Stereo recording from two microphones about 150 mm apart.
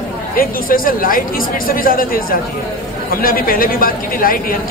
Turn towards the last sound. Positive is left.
turn(degrees=70)  # may be behind; listen again after turning